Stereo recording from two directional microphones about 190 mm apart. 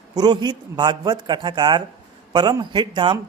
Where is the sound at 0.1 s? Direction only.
20° right (ahead or behind).